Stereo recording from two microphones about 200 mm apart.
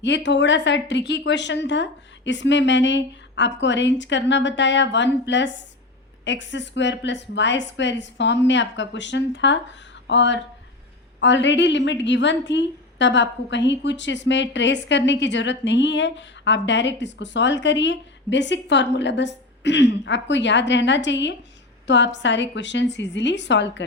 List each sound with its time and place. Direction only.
0.0 s a woman's voice: 65° left (ahead or behind)